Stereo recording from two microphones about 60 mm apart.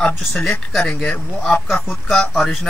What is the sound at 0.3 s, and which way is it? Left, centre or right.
Speech, centre.